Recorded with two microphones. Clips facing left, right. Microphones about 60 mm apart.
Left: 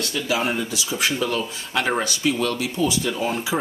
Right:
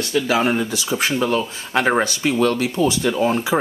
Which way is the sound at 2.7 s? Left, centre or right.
Right.